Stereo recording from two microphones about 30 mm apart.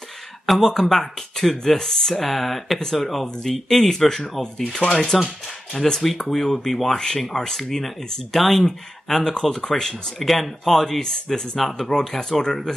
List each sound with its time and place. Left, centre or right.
0.5 s speech: centre
3.6 s speech: centre
5.1 s speech: centre
5.7 s speech: centre
11.9 s speech: left